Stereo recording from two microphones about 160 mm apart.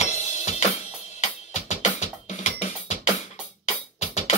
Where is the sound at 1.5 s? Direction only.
45° left (ahead or behind).